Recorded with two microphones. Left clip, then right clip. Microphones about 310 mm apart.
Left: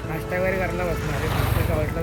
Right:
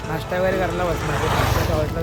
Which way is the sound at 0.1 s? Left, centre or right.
Centre.